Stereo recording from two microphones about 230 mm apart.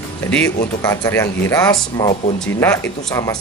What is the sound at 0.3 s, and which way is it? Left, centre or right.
Speech, centre.